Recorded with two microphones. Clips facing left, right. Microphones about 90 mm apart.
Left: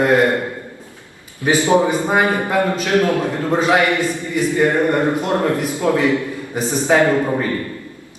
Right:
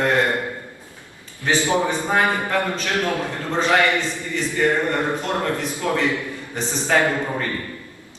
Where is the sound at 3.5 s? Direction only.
15° left (ahead or behind).